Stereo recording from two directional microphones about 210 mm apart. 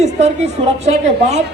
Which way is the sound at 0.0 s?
30° right (ahead or behind).